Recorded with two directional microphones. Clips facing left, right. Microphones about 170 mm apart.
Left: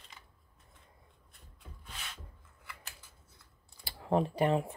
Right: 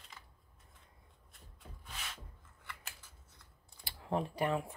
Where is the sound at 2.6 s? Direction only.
Centre (ahead or behind).